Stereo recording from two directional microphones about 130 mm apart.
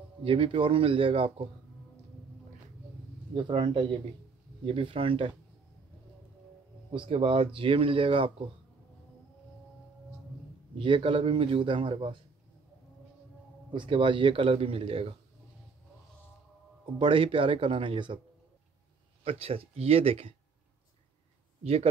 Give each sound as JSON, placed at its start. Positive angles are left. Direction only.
{"t": 0.2, "sound": "speech", "side_deg": -45}
{"t": 3.3, "sound": "a man's voice", "side_deg": -40}
{"t": 6.9, "sound": "speech", "side_deg": -40}
{"t": 10.8, "sound": "a man's voice", "side_deg": -40}
{"t": 13.7, "sound": "speech", "side_deg": -40}
{"t": 17.0, "sound": "a man's voice", "side_deg": -40}
{"t": 19.2, "sound": "speech", "side_deg": -45}